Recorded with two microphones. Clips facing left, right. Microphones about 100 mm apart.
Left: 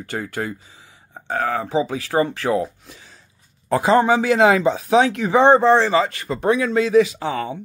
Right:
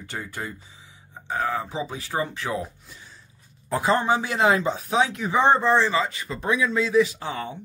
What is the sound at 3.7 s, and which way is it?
Speech, 85° left.